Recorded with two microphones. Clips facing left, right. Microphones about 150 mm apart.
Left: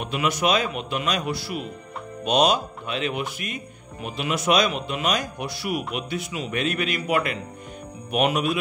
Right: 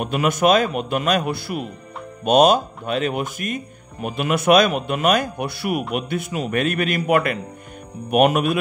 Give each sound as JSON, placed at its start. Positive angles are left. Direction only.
{"t": 0.0, "sound": "speech", "side_deg": -50}